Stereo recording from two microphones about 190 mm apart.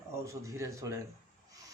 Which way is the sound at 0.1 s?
15° right (ahead or behind).